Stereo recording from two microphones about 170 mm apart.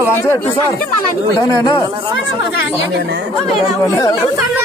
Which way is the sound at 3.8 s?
20° left (ahead or behind).